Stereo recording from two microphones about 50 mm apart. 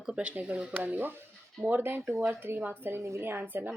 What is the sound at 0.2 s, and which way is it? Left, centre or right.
Speech, right.